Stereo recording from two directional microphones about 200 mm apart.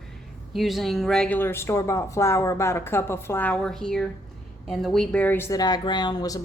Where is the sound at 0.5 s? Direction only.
Centre (ahead or behind).